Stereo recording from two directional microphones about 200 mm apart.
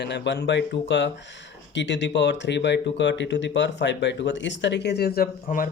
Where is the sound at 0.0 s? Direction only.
60° left (ahead or behind).